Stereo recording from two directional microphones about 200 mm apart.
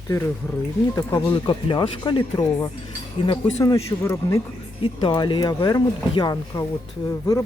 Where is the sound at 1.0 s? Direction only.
25° left (ahead or behind).